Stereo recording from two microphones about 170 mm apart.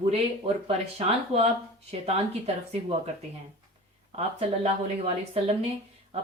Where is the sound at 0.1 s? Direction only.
35° right (ahead or behind).